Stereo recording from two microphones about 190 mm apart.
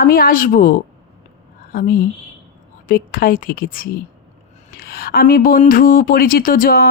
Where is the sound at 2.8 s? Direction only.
50° left (ahead or behind).